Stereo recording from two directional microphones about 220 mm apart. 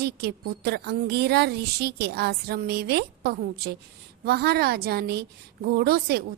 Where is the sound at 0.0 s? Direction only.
50° right (ahead or behind).